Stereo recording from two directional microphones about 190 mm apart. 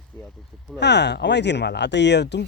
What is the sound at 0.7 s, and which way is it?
Speech, 65° left (ahead or behind).